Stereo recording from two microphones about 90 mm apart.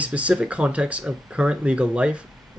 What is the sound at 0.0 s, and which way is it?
Speech, 15° right (ahead or behind).